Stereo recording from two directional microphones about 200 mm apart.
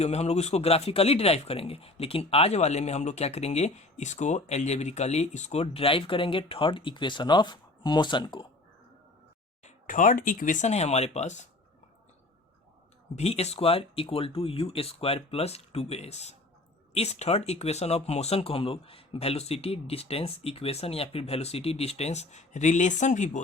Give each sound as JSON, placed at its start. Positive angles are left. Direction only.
{"t": 0.0, "sound": "speech", "side_deg": 30}
{"t": 9.6, "sound": "speech", "side_deg": 40}
{"t": 13.1, "sound": "speech", "side_deg": 30}